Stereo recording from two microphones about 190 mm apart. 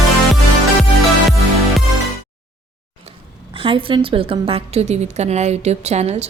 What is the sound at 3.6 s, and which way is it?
A woman's voice, 25° right (ahead or behind).